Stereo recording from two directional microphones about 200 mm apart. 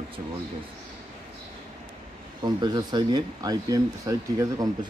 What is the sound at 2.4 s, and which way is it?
Speech, 20° right (ahead or behind).